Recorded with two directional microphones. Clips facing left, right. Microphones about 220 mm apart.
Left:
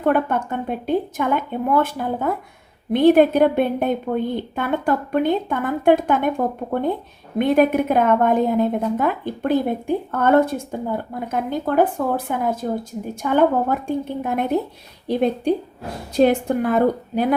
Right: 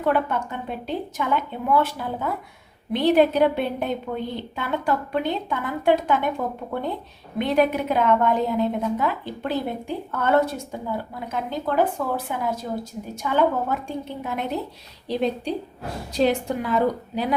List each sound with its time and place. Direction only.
0.0 s a woman's voice: 50° left (ahead or behind)